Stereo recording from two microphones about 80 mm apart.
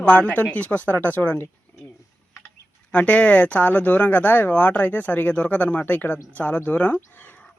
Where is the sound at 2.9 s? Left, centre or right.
Centre.